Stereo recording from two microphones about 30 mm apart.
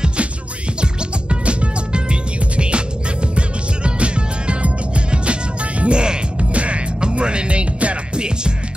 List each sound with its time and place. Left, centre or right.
1.3 s music: right
6.5 s music: right
7.0 s music: right